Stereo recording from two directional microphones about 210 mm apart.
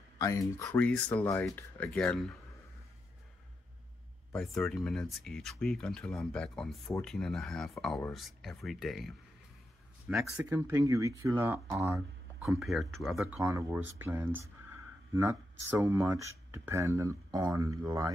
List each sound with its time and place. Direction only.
0.2 s speech: 15° left (ahead or behind)
4.3 s speech: centre (ahead or behind)
10.3 s speech: 10° right (ahead or behind)
12.4 s speech: centre (ahead or behind)
13.4 s speech: 15° right (ahead or behind)
15.8 s speech: 10° right (ahead or behind)